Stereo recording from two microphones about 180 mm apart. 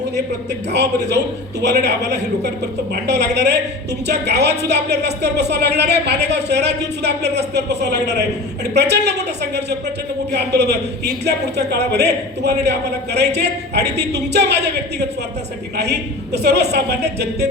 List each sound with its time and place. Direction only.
0.7 s a woman's voice: 70° right (ahead or behind)